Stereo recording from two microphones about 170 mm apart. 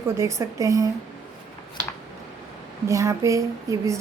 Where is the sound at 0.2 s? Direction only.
20° right (ahead or behind).